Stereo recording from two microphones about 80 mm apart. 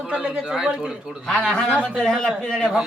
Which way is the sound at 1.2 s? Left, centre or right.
Centre.